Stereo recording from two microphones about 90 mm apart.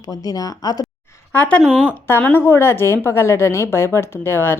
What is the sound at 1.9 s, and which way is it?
A woman's voice, 25° left (ahead or behind).